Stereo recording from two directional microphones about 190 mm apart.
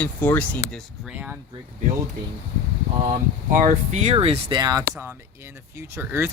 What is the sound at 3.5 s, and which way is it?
Speech, 45° right (ahead or behind).